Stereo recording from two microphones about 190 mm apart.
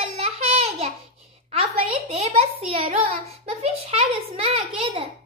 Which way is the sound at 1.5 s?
30° right (ahead or behind).